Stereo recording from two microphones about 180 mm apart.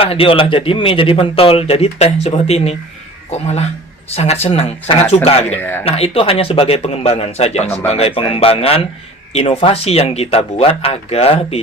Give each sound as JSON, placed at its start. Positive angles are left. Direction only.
{"t": 0.0, "sound": "speech", "side_deg": 30}
{"t": 5.5, "sound": "speech", "side_deg": 10}
{"t": 5.8, "sound": "speech", "side_deg": 30}